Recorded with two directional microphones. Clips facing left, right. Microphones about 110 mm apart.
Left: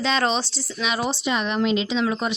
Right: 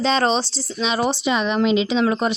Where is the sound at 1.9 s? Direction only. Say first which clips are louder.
Right 4 dB; 55° right (ahead or behind).